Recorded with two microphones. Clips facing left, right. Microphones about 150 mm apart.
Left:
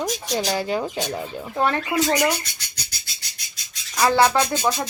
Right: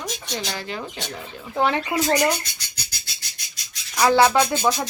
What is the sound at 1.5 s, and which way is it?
Speech, centre (ahead or behind).